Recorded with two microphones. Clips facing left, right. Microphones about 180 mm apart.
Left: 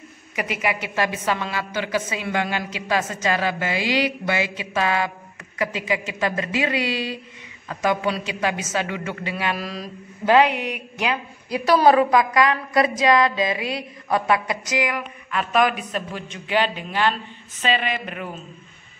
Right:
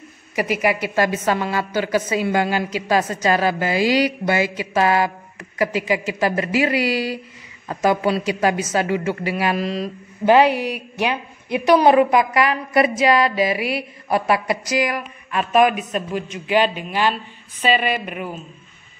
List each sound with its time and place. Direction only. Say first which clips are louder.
0.4 s a woman's voice: right 5 dB; 35° right (ahead or behind)
15.3 s a man's voice: right 4 dB; 25° right (ahead or behind)